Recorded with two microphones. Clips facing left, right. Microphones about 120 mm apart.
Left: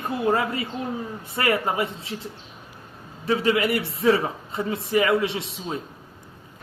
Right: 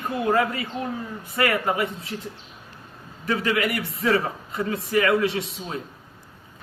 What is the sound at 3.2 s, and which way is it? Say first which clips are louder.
A man's voice: left 2 dB; 25° left (ahead or behind).